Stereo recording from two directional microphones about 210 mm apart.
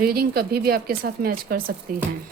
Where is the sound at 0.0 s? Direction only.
45° right (ahead or behind).